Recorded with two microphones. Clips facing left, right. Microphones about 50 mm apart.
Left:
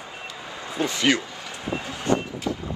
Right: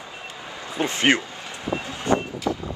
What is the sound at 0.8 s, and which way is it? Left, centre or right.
Speech, right.